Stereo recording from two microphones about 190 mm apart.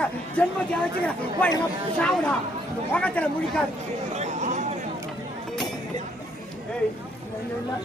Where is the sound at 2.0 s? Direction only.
5° left (ahead or behind).